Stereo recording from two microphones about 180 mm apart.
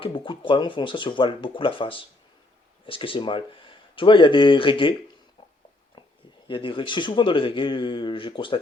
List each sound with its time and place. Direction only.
0.0 s speech: 30° left (ahead or behind)
6.5 s speech: 25° left (ahead or behind)